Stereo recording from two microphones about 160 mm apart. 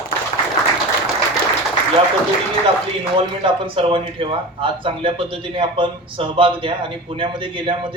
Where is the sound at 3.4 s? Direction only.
35° right (ahead or behind).